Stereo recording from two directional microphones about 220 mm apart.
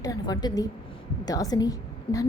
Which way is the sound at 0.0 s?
15° left (ahead or behind).